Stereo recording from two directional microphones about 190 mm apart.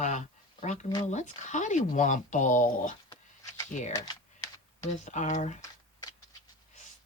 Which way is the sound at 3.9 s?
20° left (ahead or behind).